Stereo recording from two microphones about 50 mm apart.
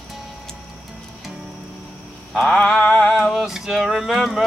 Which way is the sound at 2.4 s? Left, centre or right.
Centre.